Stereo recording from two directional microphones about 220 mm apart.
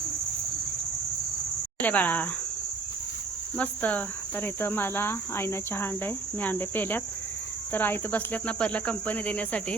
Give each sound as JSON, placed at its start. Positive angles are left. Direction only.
{"t": 1.8, "sound": "speech", "side_deg": 5}
{"t": 3.6, "sound": "speech", "side_deg": 5}